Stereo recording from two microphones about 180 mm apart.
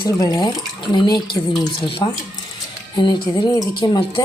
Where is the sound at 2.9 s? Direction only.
25° left (ahead or behind).